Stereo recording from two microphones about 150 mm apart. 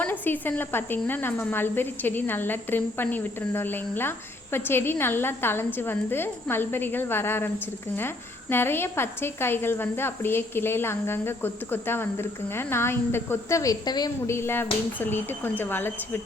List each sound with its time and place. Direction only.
0.0 s speech: 10° left (ahead or behind)